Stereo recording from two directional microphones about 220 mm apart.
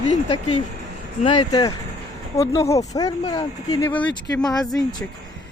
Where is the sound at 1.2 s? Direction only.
20° left (ahead or behind); by 4.7 s centre (ahead or behind).